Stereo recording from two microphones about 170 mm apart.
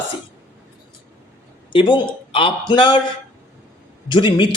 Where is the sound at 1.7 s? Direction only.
30° left (ahead or behind).